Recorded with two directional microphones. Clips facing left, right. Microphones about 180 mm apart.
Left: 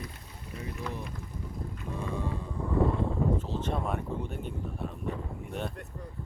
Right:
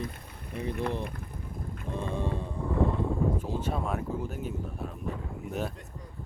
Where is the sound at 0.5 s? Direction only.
60° right (ahead or behind).